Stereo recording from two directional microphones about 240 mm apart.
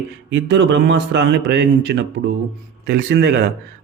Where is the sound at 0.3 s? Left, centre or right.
Right.